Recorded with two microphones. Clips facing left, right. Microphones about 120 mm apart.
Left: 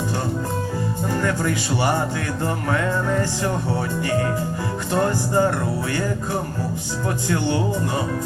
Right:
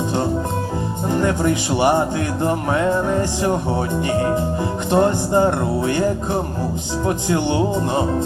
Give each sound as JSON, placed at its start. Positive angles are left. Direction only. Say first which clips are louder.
{"t": 1.0, "sound": "speech", "louder": "right 5 dB", "side_deg": -20}